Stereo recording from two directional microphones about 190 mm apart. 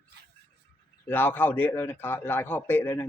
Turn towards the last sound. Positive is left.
turn(degrees=10)  # may be behind; listen again after turning